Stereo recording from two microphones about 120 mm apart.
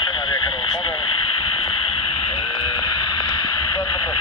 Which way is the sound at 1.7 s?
45° left (ahead or behind).